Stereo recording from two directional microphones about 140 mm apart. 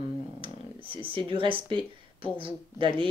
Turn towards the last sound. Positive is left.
turn(degrees=-35)  # may be behind; listen again after turning